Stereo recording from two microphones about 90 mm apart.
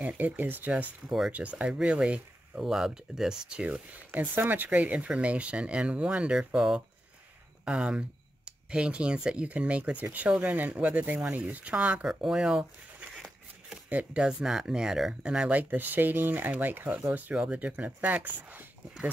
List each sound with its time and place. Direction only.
0.0 s speech: 20° right (ahead or behind)
1.0 s speech: 5° right (ahead or behind)
1.3 s speech: 15° right (ahead or behind)